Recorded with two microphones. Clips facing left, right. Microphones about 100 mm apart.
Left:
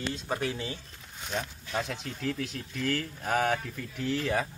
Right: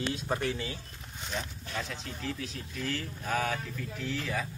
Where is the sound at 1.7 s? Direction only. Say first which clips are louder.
Left 5 dB; 65° left (ahead or behind).